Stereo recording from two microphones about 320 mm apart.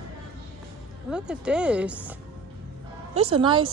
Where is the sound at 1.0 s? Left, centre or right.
Centre.